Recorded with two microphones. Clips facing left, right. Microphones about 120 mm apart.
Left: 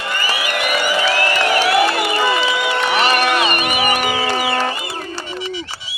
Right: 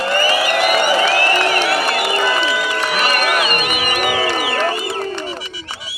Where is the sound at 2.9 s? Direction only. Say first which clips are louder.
Left 2 dB; 30° left (ahead or behind).